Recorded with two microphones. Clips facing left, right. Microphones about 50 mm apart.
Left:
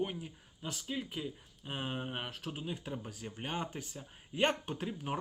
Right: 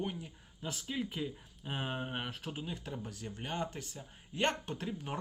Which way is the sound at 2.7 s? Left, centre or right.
Centre.